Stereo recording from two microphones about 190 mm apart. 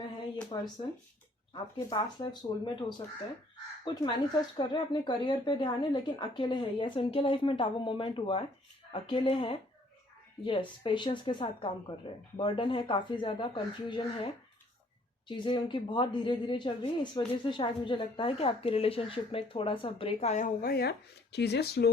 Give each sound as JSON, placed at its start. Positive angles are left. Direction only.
{"t": 0.5, "sound": "a woman's voice", "side_deg": 25}
{"t": 3.8, "sound": "a woman's voice", "side_deg": 20}
{"t": 15.3, "sound": "a woman's voice", "side_deg": 25}